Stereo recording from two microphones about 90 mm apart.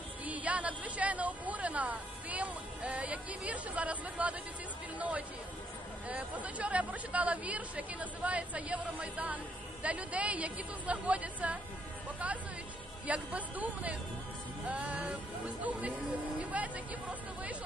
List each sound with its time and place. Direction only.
0.2 s speech: 15° right (ahead or behind)
13.0 s speech: 15° right (ahead or behind)